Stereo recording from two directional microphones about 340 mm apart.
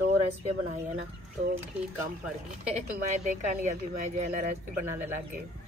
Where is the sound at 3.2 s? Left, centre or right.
Right.